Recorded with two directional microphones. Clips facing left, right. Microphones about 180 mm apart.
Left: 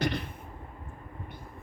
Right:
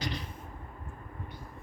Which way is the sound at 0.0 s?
55° left (ahead or behind).